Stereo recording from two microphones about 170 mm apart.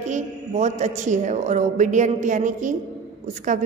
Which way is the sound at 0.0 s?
45° right (ahead or behind).